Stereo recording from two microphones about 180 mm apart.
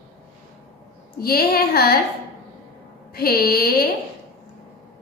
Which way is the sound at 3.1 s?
60° left (ahead or behind).